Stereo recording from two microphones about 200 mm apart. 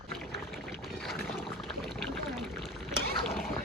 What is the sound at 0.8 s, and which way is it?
Boat, centre (ahead or behind).